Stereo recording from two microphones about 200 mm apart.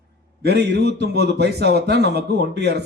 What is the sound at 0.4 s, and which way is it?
A man's voice, 55° right (ahead or behind).